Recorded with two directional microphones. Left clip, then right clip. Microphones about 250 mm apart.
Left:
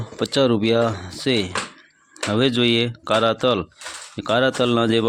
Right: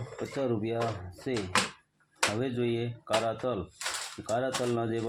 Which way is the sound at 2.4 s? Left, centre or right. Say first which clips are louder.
Left 13 dB; left.